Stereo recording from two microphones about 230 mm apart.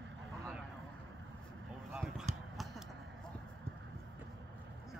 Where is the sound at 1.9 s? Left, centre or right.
Centre.